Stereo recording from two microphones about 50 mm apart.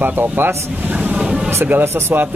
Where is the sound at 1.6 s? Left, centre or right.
Right.